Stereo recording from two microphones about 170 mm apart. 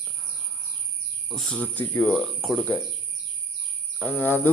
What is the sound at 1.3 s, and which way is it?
Speech, 5° left (ahead or behind).